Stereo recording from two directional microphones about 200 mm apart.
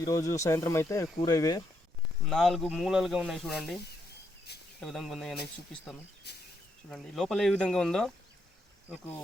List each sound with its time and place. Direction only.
0.0 s speech: 15° left (ahead or behind)
2.2 s speech: centre (ahead or behind)
4.8 s speech: centre (ahead or behind)
6.3 s speech: 55° left (ahead or behind)
6.9 s speech: centre (ahead or behind)